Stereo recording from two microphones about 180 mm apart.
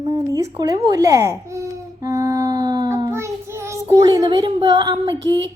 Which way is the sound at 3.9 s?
20° right (ahead or behind).